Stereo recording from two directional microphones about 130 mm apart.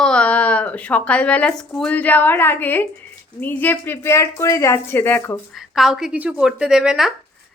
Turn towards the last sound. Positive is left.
turn(degrees=-5)  # may be behind; listen again after turning